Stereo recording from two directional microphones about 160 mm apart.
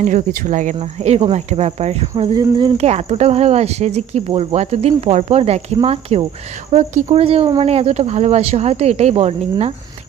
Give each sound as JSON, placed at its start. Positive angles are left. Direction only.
{"t": 0.0, "sound": "speech", "side_deg": -55}
{"t": 2.3, "sound": "speech", "side_deg": -25}